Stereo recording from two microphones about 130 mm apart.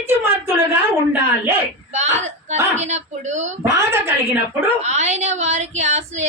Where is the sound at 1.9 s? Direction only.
60° right (ahead or behind).